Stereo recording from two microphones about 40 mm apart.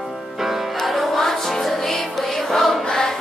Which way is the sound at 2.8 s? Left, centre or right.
Centre.